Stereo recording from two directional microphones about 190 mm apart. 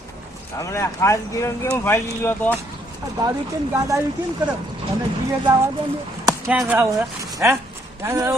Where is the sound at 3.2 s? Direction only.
15° right (ahead or behind).